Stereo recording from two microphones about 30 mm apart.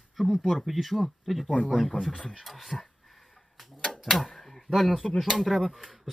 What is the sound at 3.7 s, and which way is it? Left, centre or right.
Typewriter, left.